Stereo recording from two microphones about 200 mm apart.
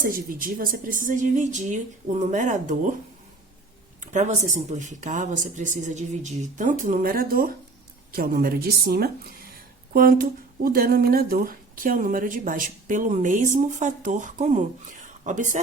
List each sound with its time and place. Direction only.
0.0 s speech: 45° right (ahead or behind)
4.0 s a woman's voice: 35° right (ahead or behind)